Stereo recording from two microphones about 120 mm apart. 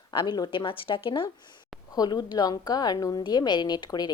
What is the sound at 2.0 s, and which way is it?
A woman's voice, 35° left (ahead or behind).